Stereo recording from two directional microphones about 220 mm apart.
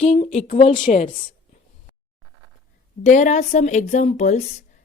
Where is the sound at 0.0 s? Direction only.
30° left (ahead or behind).